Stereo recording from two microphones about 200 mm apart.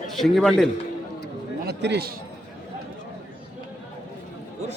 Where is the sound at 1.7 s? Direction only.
55° right (ahead or behind).